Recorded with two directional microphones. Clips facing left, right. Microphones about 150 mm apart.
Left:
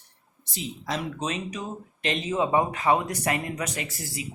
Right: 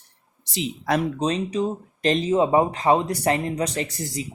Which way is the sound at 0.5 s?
80° right.